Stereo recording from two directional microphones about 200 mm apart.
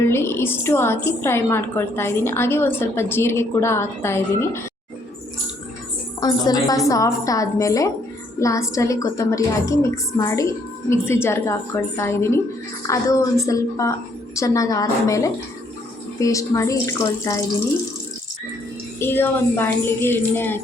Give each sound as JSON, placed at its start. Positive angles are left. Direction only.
{"t": 0.0, "sound": "a woman's voice", "side_deg": 10}
{"t": 6.1, "sound": "a woman's voice", "side_deg": 20}
{"t": 18.9, "sound": "a woman's voice", "side_deg": 10}